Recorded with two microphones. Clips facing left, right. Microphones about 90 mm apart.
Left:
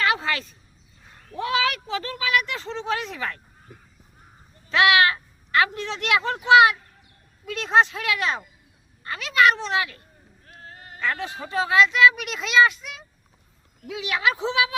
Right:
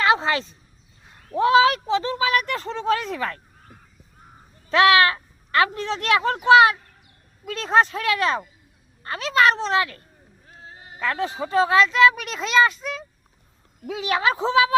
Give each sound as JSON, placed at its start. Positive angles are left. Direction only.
{"t": 0.0, "sound": "a sound", "side_deg": -25}
{"t": 1.3, "sound": "speech", "side_deg": -30}
{"t": 2.3, "sound": "speech", "side_deg": -45}
{"t": 4.7, "sound": "speech", "side_deg": -35}
{"t": 10.6, "sound": "sheep", "side_deg": -15}
{"t": 11.0, "sound": "speech", "side_deg": -35}